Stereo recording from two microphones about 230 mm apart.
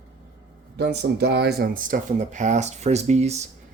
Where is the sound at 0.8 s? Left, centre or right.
Right.